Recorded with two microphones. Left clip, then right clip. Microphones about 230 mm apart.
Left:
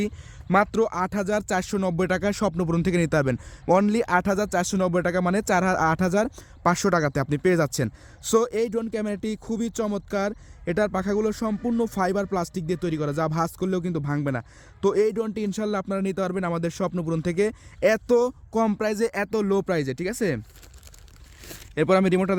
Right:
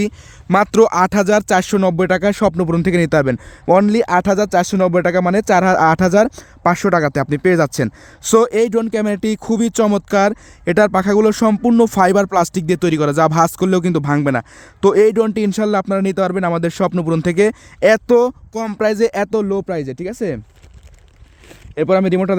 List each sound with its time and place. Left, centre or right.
0.0 s speech: right; by 19.5 s centre
19.5 s speech: centre
21.8 s speech: centre